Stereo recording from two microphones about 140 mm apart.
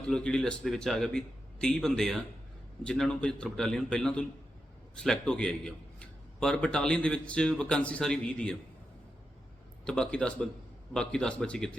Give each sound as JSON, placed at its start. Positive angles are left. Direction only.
{"t": 0.0, "sound": "a man's voice", "side_deg": 5}
{"t": 9.8, "sound": "a man's voice", "side_deg": 5}